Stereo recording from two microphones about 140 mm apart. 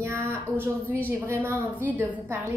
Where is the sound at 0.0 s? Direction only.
20° right (ahead or behind).